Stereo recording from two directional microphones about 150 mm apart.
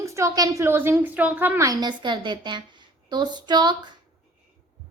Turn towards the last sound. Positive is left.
turn(degrees=-30)  # may be behind; listen again after turning